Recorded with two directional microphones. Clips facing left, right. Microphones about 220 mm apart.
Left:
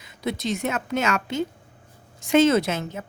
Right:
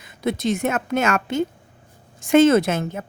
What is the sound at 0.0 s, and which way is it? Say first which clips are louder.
A woman's voice: right 5 dB; 50° right (ahead or behind).